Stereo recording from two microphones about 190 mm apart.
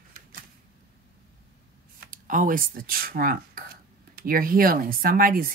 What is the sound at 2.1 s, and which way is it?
Speech, 45° right (ahead or behind).